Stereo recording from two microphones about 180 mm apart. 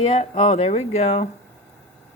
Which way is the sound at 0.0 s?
35° left (ahead or behind).